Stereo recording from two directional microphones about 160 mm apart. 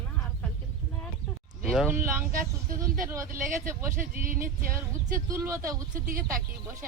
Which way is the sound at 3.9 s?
60° right (ahead or behind).